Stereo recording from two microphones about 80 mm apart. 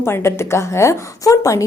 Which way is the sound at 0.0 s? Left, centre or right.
Left.